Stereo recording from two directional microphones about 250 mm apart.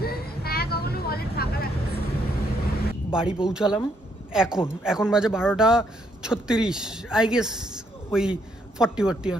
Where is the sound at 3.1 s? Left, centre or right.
Centre.